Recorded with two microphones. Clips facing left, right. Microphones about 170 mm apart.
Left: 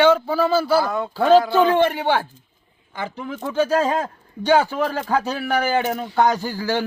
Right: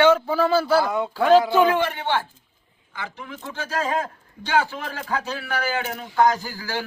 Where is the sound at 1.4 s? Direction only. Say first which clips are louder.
Left 1 dB; 15° right (ahead or behind).